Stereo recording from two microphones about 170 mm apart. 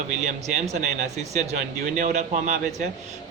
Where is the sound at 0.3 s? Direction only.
40° right (ahead or behind).